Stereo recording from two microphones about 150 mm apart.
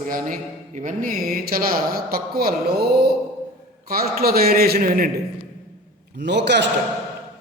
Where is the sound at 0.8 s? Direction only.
55° right (ahead or behind); by 5.1 s 75° right (ahead or behind).